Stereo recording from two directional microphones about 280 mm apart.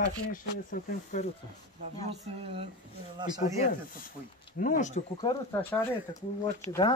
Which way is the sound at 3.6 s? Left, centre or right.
Left.